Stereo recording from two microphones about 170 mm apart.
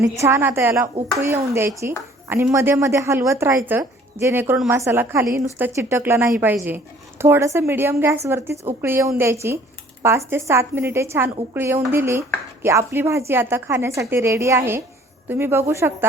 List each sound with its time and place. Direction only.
0.0 s a woman's voice: 15° right (ahead or behind)